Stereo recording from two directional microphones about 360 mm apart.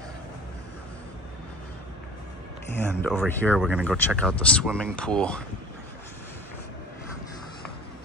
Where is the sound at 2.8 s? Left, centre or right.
Centre.